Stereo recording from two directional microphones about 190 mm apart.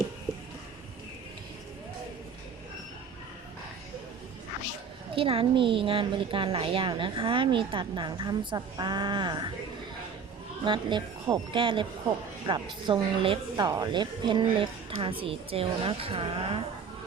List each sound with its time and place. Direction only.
5.1 s a woman's voice: 30° right (ahead or behind)
10.7 s a woman's voice: 25° right (ahead or behind)